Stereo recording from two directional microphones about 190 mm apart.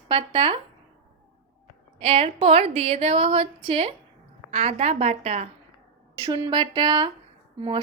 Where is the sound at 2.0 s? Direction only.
30° right (ahead or behind).